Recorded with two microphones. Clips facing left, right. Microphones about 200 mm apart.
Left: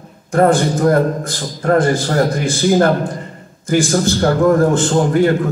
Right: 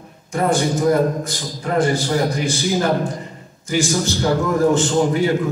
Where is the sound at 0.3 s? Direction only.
55° left (ahead or behind).